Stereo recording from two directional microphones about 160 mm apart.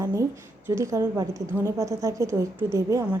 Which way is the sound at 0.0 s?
20° right (ahead or behind).